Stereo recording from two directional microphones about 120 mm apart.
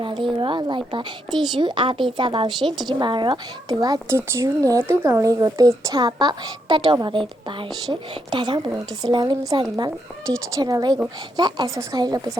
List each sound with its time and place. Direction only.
0.0 s a woman's voice: 45° right (ahead or behind)
2.6 s a woman's voice: centre (ahead or behind)
2.8 s speech: 40° right (ahead or behind)
8.3 s speech: 40° right (ahead or behind)
9.1 s speech: 30° right (ahead or behind)